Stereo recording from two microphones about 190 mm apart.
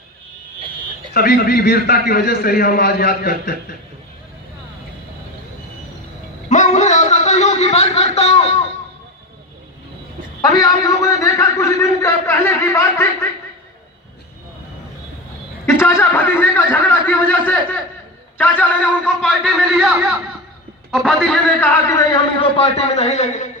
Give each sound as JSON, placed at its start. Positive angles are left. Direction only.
{"t": 1.1, "sound": "a man's voice", "side_deg": 55}
{"t": 6.5, "sound": "a sound", "side_deg": 40}
{"t": 10.4, "sound": "a man's voice", "side_deg": 20}
{"t": 16.0, "sound": "a man's voice", "side_deg": 10}